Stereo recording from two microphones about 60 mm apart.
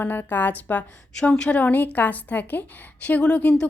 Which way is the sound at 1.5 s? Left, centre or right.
Left.